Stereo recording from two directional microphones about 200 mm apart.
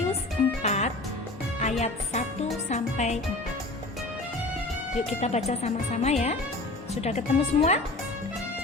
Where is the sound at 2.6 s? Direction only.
35° left (ahead or behind).